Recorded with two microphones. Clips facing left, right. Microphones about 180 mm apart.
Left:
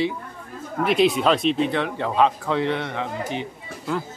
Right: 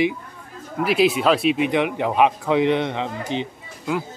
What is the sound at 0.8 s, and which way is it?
Speech, 5° right (ahead or behind).